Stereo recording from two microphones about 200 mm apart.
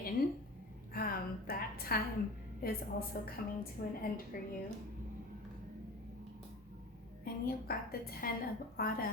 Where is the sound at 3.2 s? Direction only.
45° left (ahead or behind).